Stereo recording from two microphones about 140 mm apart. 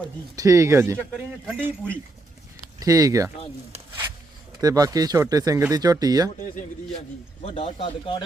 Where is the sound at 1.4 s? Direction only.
5° left (ahead or behind).